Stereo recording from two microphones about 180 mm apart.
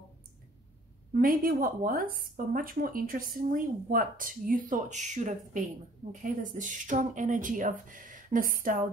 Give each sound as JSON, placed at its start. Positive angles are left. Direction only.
{"t": 1.2, "sound": "speech", "side_deg": -50}